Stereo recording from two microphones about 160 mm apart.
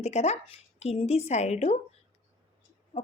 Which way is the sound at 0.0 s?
40° left (ahead or behind).